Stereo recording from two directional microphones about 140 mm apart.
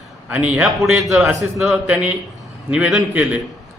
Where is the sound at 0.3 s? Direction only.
10° right (ahead or behind).